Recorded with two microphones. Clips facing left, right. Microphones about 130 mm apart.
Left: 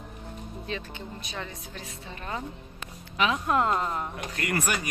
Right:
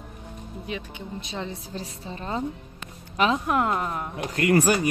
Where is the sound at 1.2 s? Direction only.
25° right (ahead or behind).